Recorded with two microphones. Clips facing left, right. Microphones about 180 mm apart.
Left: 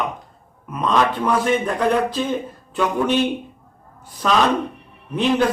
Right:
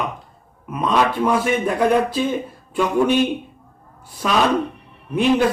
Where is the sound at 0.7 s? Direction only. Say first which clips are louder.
Even; 10° right (ahead or behind).